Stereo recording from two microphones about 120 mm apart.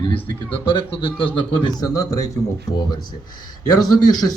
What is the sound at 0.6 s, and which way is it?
Speech, 45° left (ahead or behind).